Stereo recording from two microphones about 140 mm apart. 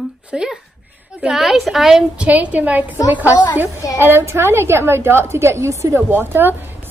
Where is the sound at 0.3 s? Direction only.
5° right (ahead or behind).